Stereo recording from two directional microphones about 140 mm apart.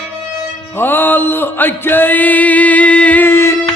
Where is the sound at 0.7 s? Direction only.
15° left (ahead or behind).